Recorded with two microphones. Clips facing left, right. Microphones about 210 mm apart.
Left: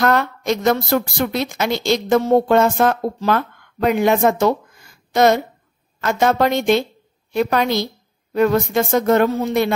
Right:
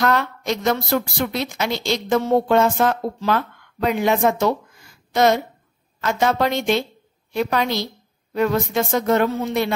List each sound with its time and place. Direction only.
0.0 s a woman's voice: 50° left (ahead or behind)